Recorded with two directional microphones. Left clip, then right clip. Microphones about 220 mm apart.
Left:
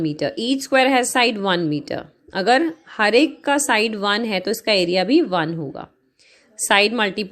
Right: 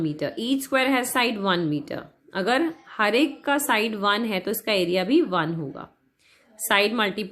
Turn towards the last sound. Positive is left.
turn(degrees=30)  # may be behind; listen again after turning